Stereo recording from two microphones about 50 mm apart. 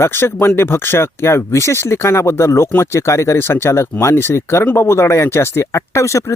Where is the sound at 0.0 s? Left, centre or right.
Left.